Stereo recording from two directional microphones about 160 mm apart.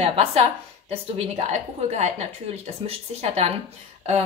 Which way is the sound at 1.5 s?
45° right (ahead or behind).